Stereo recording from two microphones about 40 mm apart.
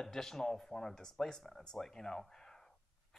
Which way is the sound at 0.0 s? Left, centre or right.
Centre.